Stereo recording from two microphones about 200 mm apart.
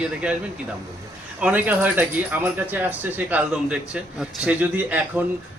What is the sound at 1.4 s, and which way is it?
Speech, 10° right (ahead or behind).